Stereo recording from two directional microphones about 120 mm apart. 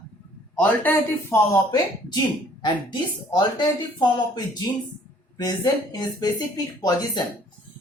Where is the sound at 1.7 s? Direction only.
40° left (ahead or behind).